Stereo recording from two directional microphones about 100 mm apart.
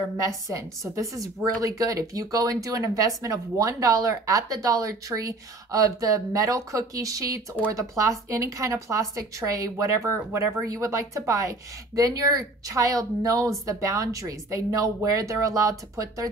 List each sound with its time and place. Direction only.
0.5 s a woman's voice: 35° right (ahead or behind)